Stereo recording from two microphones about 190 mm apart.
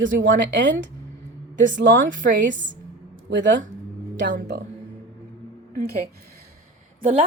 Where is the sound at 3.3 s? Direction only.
70° right (ahead or behind).